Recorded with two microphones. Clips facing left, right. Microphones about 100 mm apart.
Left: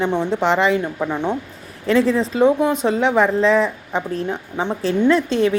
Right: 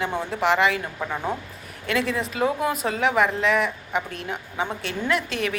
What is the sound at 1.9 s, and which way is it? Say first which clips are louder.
Speech: left 8 dB; 30° left (ahead or behind).